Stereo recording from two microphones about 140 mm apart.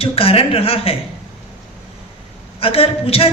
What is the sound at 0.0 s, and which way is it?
Speech, 45° left (ahead or behind).